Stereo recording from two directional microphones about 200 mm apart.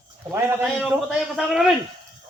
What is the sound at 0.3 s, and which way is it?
Speech, 10° right (ahead or behind).